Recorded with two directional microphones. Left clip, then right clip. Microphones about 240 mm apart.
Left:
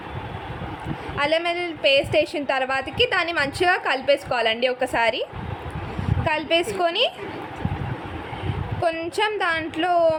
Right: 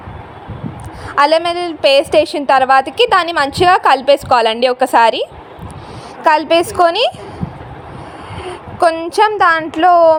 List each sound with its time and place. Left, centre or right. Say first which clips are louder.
1.1 s a woman's voice: right 11 dB; right
8.8 s a woman's voice: right 11 dB; right